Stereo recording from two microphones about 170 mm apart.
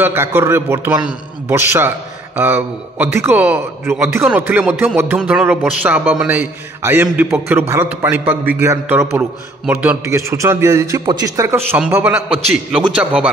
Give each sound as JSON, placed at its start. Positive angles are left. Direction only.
{"t": 0.0, "sound": "a man's voice", "side_deg": -15}